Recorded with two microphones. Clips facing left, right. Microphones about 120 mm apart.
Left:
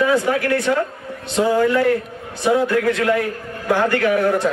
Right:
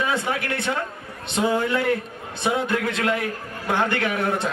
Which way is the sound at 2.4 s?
20° right (ahead or behind).